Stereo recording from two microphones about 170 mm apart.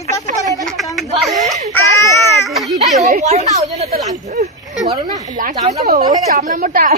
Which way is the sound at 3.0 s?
40° right (ahead or behind).